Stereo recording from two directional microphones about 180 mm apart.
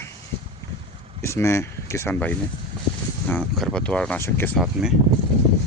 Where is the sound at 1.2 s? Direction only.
15° left (ahead or behind).